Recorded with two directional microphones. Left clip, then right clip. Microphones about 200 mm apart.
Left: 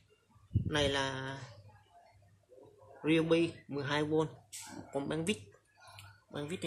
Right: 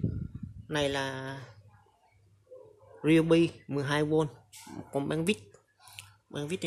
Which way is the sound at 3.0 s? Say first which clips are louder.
Right 5 dB; 30° right (ahead or behind).